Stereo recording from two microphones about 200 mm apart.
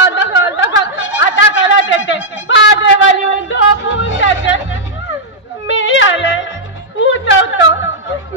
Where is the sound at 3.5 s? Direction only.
70° left (ahead or behind).